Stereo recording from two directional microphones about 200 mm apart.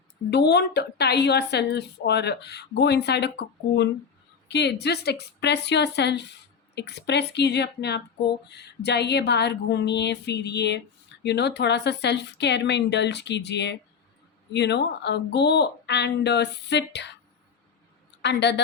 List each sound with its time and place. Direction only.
0.3 s a woman's voice: 55° left (ahead or behind)
18.2 s a woman's voice: 60° left (ahead or behind)